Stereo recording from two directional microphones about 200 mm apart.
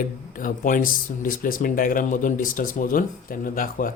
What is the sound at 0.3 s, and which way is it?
Speech, 45° left (ahead or behind).